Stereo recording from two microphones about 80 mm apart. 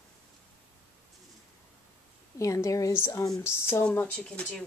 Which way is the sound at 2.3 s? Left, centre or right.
Left.